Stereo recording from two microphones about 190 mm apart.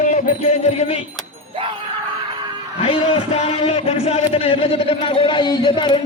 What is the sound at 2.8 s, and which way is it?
A man's voice, 30° left (ahead or behind).